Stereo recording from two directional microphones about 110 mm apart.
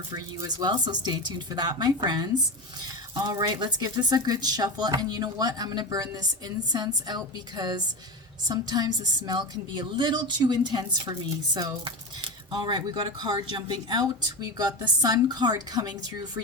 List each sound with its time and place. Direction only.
0.1 s speech: 40° right (ahead or behind)
3.2 s speech: 40° right (ahead or behind)